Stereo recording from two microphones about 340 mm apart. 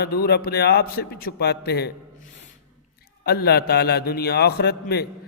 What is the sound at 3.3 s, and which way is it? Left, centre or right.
A man's voice, left.